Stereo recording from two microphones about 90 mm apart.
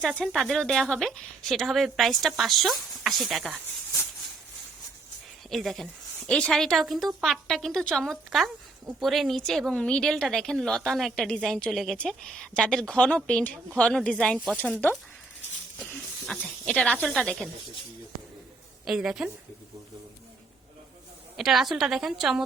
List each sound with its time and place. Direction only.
0.0 s speech: 5° left (ahead or behind)
5.5 s a woman's voice: centre (ahead or behind)
14.5 s speech: 15° left (ahead or behind)
15.8 s speech: 5° left (ahead or behind)
18.9 s speech: 5° right (ahead or behind)
21.3 s speech: 5° right (ahead or behind)